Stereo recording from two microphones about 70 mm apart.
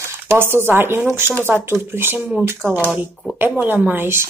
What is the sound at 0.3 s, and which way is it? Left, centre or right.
Speech, right.